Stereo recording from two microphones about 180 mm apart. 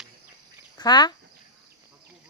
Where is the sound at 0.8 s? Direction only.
25° left (ahead or behind).